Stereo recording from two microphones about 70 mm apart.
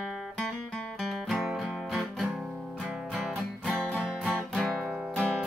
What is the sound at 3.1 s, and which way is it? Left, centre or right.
Music, centre.